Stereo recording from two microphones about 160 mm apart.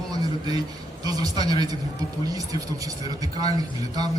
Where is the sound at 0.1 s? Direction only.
25° right (ahead or behind).